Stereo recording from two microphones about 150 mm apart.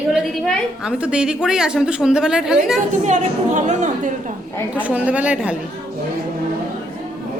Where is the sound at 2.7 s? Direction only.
55° right (ahead or behind).